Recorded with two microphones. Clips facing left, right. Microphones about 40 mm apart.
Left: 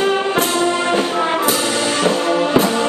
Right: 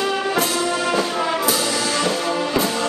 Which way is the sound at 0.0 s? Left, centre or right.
Left.